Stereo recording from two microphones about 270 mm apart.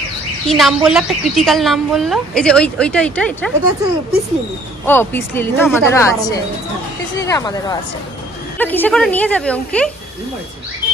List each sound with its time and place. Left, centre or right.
0.5 s a woman's voice: centre
4.8 s a woman's voice: centre